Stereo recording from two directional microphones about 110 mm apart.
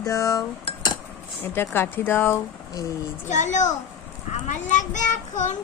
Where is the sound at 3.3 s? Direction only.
90° left.